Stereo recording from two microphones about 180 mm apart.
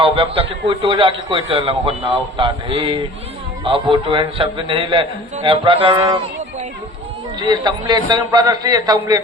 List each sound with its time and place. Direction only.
0.0 s a man's voice: 30° right (ahead or behind)
7.3 s a man's voice: 25° right (ahead or behind)